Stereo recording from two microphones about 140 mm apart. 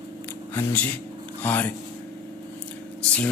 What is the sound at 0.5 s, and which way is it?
Speech, 10° left (ahead or behind).